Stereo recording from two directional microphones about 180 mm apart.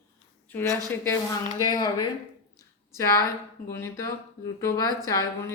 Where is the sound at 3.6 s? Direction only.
15° left (ahead or behind).